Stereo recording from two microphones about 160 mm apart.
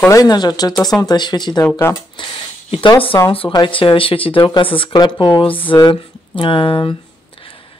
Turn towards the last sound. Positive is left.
turn(degrees=30)  # may be behind; listen again after turning